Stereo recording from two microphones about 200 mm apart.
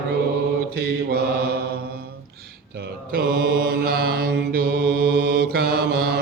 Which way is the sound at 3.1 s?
50° right (ahead or behind).